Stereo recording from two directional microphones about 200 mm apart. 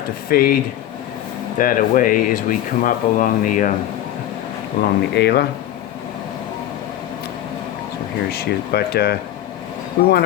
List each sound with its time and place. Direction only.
0.3 s speech: 45° left (ahead or behind)
4.8 s speech: 55° left (ahead or behind)
8.3 s speech: 50° left (ahead or behind)